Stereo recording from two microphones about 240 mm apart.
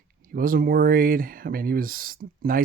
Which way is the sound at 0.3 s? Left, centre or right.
Right.